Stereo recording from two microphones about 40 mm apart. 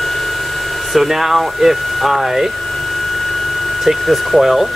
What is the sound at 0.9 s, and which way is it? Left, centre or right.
Speech, centre.